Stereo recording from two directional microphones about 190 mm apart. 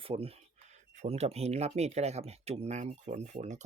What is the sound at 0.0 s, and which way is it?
Speech, 30° right (ahead or behind).